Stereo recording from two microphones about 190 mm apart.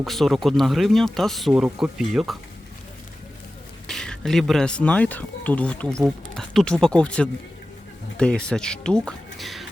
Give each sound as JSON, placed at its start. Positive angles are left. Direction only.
{"t": 0.0, "sound": "speech", "side_deg": 0}
{"t": 3.8, "sound": "speech", "side_deg": 5}